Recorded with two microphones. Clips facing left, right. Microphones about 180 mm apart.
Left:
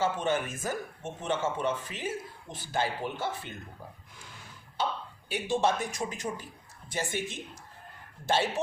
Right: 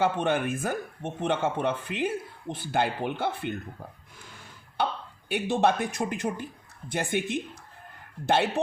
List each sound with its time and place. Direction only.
0.0 s speech: 60° right (ahead or behind)
4.8 s a sound: 60° right (ahead or behind)
5.3 s speech: 60° right (ahead or behind)